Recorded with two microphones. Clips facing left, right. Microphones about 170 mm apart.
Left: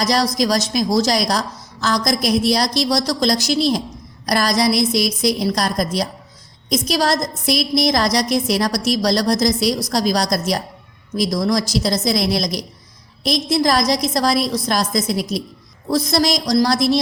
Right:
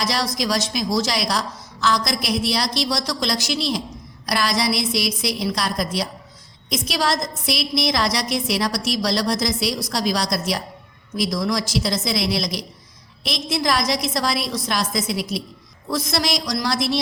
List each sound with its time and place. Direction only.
0.0 s a woman's voice: 40° left (ahead or behind)